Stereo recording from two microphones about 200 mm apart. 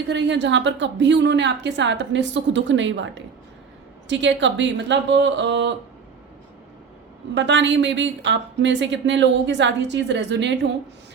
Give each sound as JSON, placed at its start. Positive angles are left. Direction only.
{"t": 0.1, "sound": "a woman's voice", "side_deg": -60}
{"t": 4.1, "sound": "a woman's voice", "side_deg": -65}
{"t": 7.3, "sound": "a woman's voice", "side_deg": -65}